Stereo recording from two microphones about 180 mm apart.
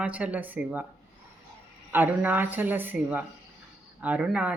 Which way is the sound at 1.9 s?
10° right (ahead or behind).